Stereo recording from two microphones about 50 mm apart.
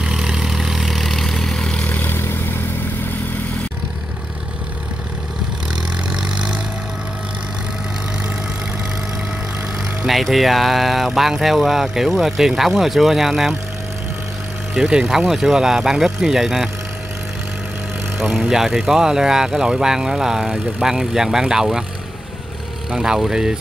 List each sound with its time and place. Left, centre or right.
0.0 s vehicle: centre
1.9 s vehicle: left
5.8 s vehicle: centre
10.0 s speech: centre
14.7 s speech: centre
18.1 s speech: centre
22.8 s speech: centre